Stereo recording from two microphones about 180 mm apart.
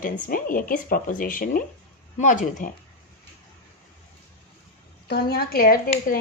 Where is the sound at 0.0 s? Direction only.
50° left (ahead or behind).